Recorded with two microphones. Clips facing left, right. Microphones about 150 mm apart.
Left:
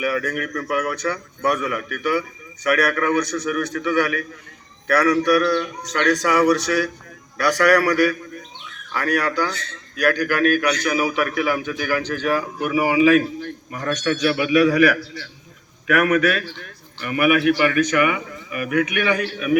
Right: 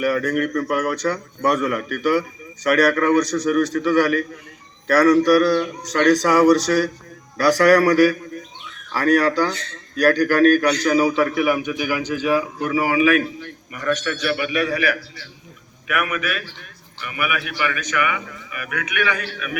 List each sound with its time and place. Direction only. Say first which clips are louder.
0.0 s a man's voice: right 4 dB; 35° right (ahead or behind); by 12.7 s centre (ahead or behind)
13.0 s a man's voice: left 5 dB; 30° left (ahead or behind)
14.3 s a man's voice: left 6 dB; 90° left
15.9 s a man's voice: left 7 dB; 40° left (ahead or behind)